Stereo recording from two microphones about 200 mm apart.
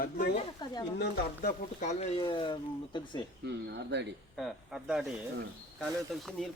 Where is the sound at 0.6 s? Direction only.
20° left (ahead or behind).